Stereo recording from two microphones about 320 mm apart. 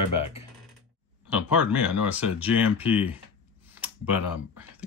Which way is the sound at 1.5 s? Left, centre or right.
Centre.